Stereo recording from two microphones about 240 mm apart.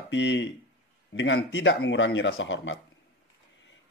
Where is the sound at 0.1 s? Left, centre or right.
Left.